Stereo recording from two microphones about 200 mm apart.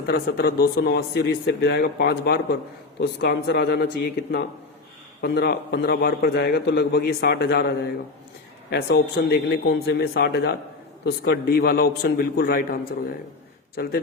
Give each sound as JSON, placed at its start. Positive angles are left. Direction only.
{"t": 0.1, "sound": "a man's voice", "side_deg": 50}
{"t": 8.7, "sound": "a man's voice", "side_deg": 55}